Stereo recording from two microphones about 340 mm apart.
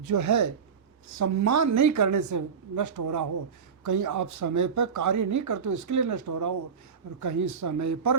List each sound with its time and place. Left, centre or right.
0.0 s speech: right